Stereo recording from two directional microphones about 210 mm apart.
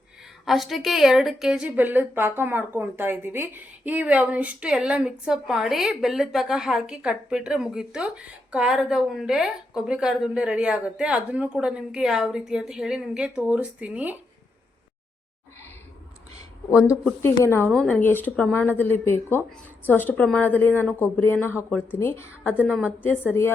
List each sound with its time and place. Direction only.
0.4 s a woman's voice: centre (ahead or behind)
16.7 s a woman's voice: 5° right (ahead or behind)
17.0 s a woman's voice: 5° left (ahead or behind)